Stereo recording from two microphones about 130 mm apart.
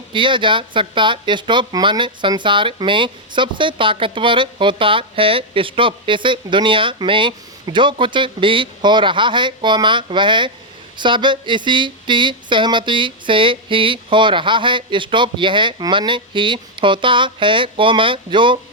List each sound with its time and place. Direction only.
0.1 s speech: 40° right (ahead or behind)